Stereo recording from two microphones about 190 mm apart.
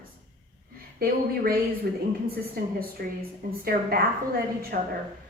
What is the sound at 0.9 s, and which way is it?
A woman's voice, 50° right (ahead or behind).